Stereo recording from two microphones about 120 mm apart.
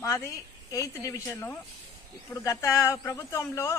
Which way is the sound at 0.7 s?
25° left (ahead or behind).